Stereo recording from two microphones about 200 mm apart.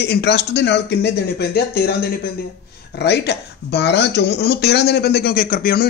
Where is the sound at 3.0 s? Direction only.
55° left (ahead or behind).